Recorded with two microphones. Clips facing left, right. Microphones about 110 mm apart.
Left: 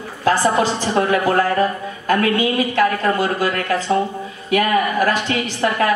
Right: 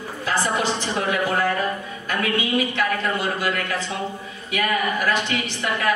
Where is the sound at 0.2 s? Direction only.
40° left (ahead or behind).